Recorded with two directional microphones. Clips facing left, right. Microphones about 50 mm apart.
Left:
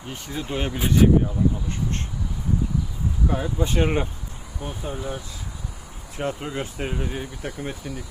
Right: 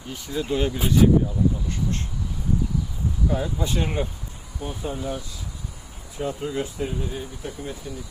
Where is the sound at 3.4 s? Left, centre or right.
Left.